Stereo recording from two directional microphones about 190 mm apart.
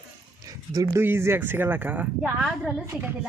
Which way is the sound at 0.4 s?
20° right (ahead or behind).